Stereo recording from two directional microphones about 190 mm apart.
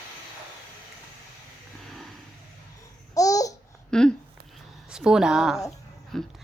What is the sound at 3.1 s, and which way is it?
Babbling, 20° left (ahead or behind).